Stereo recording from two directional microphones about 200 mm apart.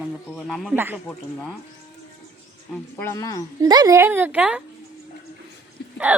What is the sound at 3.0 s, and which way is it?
Speech, 15° left (ahead or behind).